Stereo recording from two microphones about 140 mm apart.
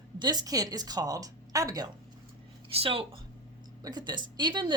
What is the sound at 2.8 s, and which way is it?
Speech, 40° right (ahead or behind).